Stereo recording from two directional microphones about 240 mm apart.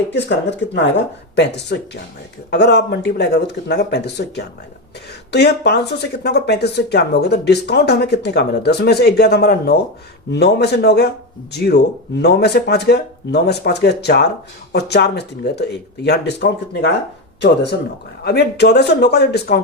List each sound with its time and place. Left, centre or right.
0.1 s speech: left